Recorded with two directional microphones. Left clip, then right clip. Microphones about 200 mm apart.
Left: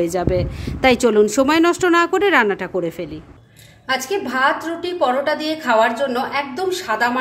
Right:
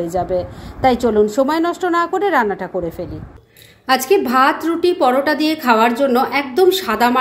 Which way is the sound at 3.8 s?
40° right (ahead or behind).